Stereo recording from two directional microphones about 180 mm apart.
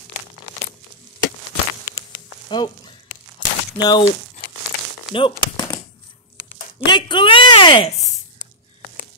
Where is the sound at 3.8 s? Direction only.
25° left (ahead or behind).